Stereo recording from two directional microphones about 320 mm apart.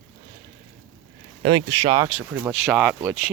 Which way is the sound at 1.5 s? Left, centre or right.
Centre.